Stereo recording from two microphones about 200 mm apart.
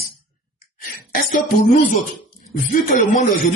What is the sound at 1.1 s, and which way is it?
Music, 45° left (ahead or behind).